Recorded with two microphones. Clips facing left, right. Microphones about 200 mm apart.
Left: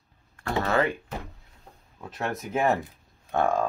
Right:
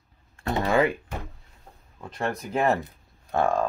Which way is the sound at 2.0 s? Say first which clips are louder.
Right 2 dB; centre (ahead or behind).